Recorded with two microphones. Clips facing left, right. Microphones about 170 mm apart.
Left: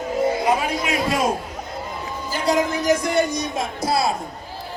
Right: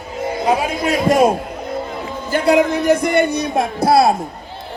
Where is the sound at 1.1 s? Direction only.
60° right (ahead or behind).